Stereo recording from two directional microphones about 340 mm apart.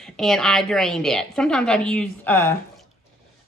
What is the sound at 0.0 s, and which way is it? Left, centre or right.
Speech, centre.